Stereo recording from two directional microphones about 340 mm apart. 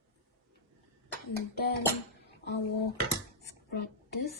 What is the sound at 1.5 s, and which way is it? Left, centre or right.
Speech, left.